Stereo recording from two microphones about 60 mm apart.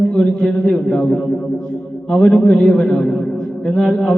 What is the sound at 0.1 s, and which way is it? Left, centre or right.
A man's voice, centre.